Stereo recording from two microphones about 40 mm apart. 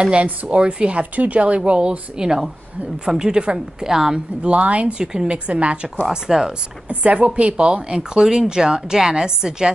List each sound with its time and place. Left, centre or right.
0.0 s speech: right
1.1 s speech: right
1.6 s speech: right
4.4 s speech: right
4.9 s speech: centre
5.3 s speech: right
6.0 s speech: centre
6.9 s speech: right; by 9.7 s centre